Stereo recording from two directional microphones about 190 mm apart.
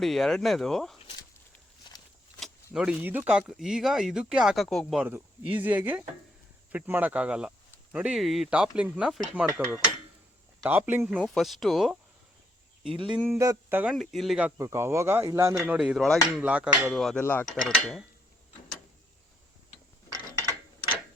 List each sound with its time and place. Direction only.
0.0 s speech: centre (ahead or behind)
2.7 s speech: 5° right (ahead or behind)
10.6 s speech: 10° right (ahead or behind)
12.9 s speech: 25° right (ahead or behind)
13.1 s speech: 10° right (ahead or behind)
13.9 s speech: centre (ahead or behind)
14.6 s speech: 15° right (ahead or behind); by 18.0 s 5° left (ahead or behind)